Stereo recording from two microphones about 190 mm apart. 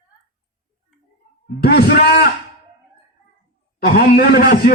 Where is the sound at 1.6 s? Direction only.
55° left (ahead or behind).